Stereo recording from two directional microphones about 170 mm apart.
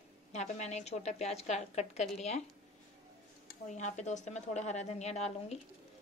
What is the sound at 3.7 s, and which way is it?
A woman's voice, 45° left (ahead or behind).